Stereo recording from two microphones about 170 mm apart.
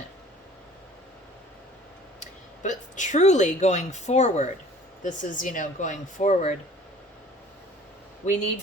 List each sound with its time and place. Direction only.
2.6 s speech: 45° left (ahead or behind)
8.2 s speech: 45° left (ahead or behind)